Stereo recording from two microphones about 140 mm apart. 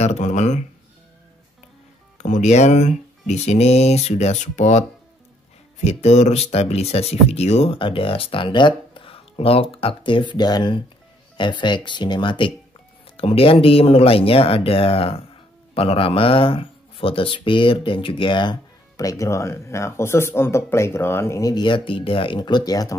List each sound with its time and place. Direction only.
0.0 s speech: 55° left (ahead or behind)
2.1 s speech: 60° left (ahead or behind)
5.9 s speech: 55° left (ahead or behind); by 22.9 s 25° left (ahead or behind)